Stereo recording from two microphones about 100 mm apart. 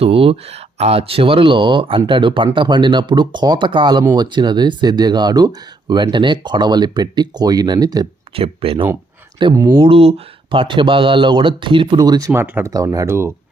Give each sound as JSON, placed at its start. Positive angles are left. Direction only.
{"t": 0.0, "sound": "speech", "side_deg": -70}
{"t": 8.3, "sound": "speech", "side_deg": -70}
{"t": 9.6, "sound": "speech", "side_deg": -25}
{"t": 9.8, "sound": "speech", "side_deg": -75}
{"t": 12.0, "sound": "speech", "side_deg": -40}
{"t": 12.3, "sound": "speech", "side_deg": -20}
{"t": 12.7, "sound": "speech", "side_deg": -35}